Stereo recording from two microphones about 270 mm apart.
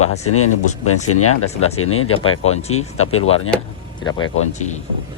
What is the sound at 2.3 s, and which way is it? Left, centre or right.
Speech, left.